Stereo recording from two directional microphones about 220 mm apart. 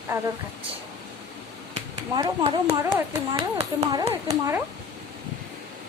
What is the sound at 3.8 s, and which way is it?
Speech, 15° right (ahead or behind).